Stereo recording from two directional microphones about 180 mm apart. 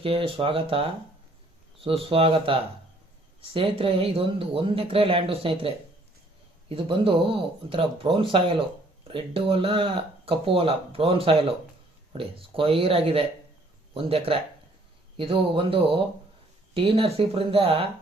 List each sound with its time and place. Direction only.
0.0 s speech: 30° right (ahead or behind)